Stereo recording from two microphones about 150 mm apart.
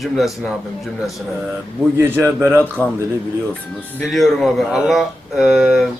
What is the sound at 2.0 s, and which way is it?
Speech, 15° right (ahead or behind).